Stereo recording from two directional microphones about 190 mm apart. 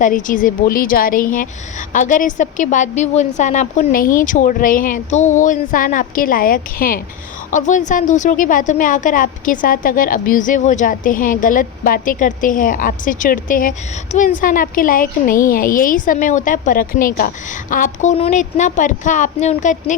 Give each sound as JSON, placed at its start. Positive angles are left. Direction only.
{"t": 0.0, "sound": "a woman's voice", "side_deg": 45}